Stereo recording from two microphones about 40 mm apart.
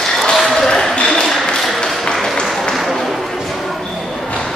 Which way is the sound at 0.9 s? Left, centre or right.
Left.